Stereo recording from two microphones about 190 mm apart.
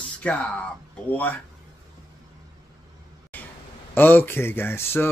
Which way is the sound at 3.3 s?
10° left (ahead or behind).